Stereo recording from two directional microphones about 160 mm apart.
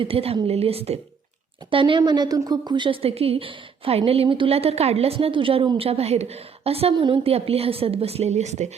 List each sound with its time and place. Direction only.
0.0 s a woman's voice: 35° right (ahead or behind)